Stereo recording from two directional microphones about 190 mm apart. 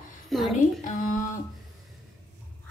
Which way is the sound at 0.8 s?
40° left (ahead or behind).